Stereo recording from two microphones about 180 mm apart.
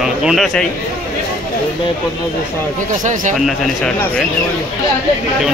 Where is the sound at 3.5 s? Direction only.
5° left (ahead or behind).